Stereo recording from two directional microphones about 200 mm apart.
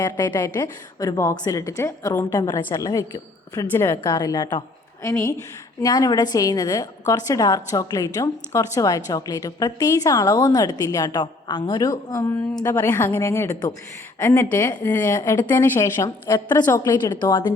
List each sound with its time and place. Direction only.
0.0 s a woman's voice: 20° left (ahead or behind)
5.8 s a woman's voice: 20° left (ahead or behind)